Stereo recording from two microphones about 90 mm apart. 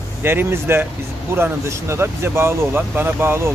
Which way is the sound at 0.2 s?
25° right (ahead or behind).